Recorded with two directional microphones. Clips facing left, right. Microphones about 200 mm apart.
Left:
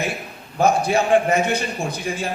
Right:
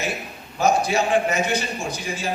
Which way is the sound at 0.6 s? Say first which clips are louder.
Left 2 dB; 55° left (ahead or behind).